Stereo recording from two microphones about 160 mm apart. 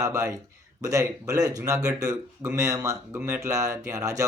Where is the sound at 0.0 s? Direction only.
20° right (ahead or behind).